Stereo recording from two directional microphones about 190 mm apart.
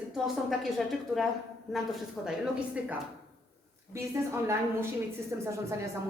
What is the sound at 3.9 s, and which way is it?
A woman's voice, 15° right (ahead or behind).